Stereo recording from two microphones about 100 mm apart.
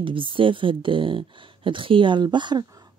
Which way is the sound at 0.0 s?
60° right (ahead or behind).